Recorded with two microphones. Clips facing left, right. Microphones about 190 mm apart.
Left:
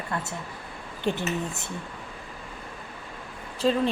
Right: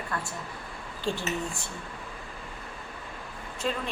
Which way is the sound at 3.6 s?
30° left (ahead or behind).